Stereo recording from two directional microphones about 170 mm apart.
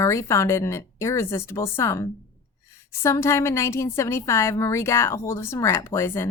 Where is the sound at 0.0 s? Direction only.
15° left (ahead or behind).